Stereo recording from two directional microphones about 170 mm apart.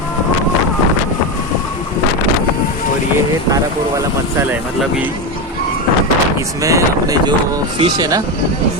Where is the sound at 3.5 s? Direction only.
15° right (ahead or behind).